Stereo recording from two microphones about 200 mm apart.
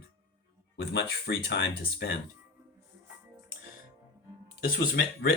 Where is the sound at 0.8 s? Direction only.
60° left (ahead or behind).